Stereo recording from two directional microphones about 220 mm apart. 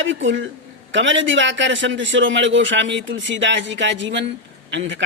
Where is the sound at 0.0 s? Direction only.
60° right (ahead or behind).